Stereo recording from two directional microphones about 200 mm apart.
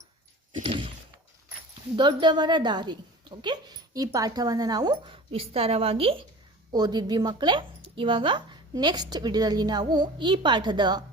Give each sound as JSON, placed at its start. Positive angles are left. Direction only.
{"t": 0.5, "sound": "speech", "side_deg": -25}
{"t": 2.0, "sound": "speech", "side_deg": -20}